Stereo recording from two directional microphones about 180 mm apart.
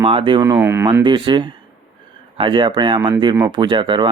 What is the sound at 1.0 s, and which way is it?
Speech, 25° right (ahead or behind).